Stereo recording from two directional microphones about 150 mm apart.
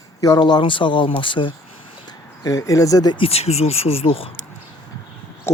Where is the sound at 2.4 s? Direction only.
25° left (ahead or behind); by 4.3 s 40° left (ahead or behind).